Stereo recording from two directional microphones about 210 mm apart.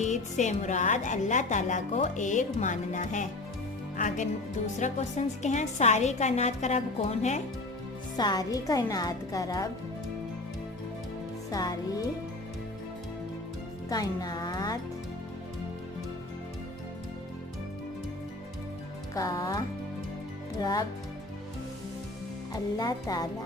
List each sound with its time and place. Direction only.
0.0 s speech: 35° left (ahead or behind)
8.1 s speech: 20° left (ahead or behind)
11.5 s speech: 15° left (ahead or behind)
13.9 s speech: 20° left (ahead or behind)
19.1 s speech: 15° left (ahead or behind)
22.5 s speech: 15° left (ahead or behind)